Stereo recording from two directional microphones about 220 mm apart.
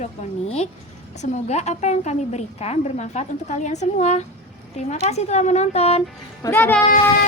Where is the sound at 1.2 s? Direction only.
30° left (ahead or behind).